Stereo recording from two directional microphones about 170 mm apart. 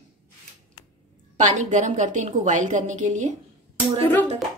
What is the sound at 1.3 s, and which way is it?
A woman's voice, 45° right (ahead or behind).